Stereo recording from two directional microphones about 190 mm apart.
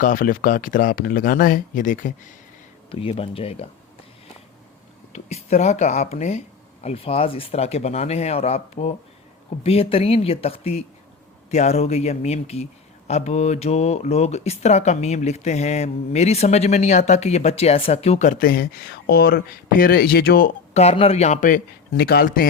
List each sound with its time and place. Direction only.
0.0 s speech: 45° left (ahead or behind)
2.9 s speech: 30° left (ahead or behind)
5.1 s speech: 35° left (ahead or behind); by 20.5 s 55° left (ahead or behind)
20.7 s speech: 35° left (ahead or behind); by 22.4 s 50° left (ahead or behind)